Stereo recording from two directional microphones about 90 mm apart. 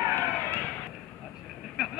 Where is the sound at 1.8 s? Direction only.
5° right (ahead or behind).